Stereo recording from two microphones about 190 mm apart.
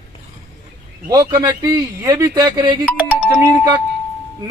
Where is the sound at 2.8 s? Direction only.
5° right (ahead or behind).